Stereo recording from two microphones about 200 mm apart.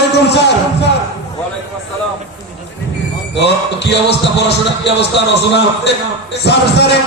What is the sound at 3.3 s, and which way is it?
Music, 60° left (ahead or behind).